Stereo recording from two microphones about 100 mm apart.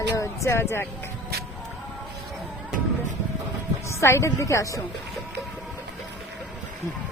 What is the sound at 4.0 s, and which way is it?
Speech, 30° left (ahead or behind).